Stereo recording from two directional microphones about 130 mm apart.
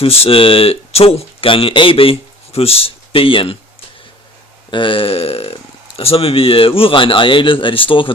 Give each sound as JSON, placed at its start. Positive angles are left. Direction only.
{"t": 0.0, "sound": "speech", "side_deg": 50}
{"t": 4.7, "sound": "speech", "side_deg": 40}